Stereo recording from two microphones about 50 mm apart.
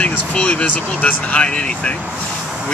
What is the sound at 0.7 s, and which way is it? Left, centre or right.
Speech, left.